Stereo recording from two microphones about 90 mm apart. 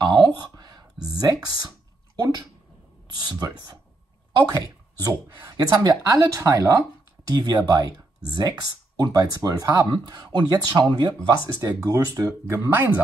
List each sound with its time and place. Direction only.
0.0 s a sound: 55° right (ahead or behind)
1.2 s speech: 45° right (ahead or behind)
3.2 s speech: 50° right (ahead or behind)
5.5 s speech: 45° right (ahead or behind)
9.8 s speech: 55° right (ahead or behind)
11.2 s speech: 40° right (ahead or behind)
12.5 s speech: 25° right (ahead or behind)